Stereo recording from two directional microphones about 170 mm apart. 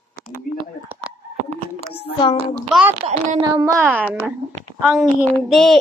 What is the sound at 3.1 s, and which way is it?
Speech, 45° right (ahead or behind).